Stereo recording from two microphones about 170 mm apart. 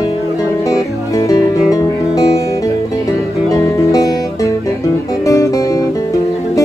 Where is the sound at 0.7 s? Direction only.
20° left (ahead or behind).